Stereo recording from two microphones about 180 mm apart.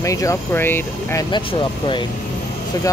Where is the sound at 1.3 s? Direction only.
30° left (ahead or behind).